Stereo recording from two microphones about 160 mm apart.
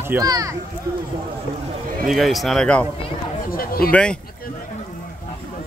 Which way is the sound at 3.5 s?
65° left (ahead or behind).